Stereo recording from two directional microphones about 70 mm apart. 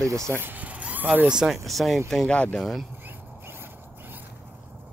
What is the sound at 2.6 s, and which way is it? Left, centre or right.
Speech, centre.